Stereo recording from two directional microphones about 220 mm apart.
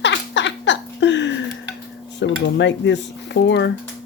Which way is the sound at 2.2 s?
55° left (ahead or behind).